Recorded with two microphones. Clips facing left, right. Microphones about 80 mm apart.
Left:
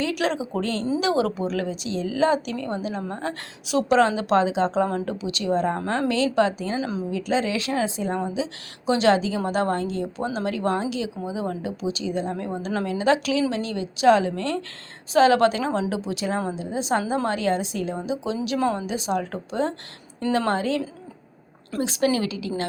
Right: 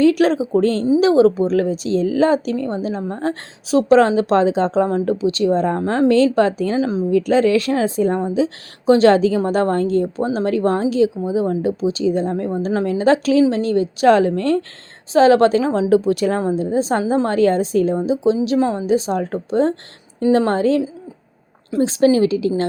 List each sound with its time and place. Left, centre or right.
0.0 s a woman's voice: right
6.7 s a woman's voice: right
7.1 s a woman's voice: right
16.6 s a woman's voice: right
18.9 s a woman's voice: right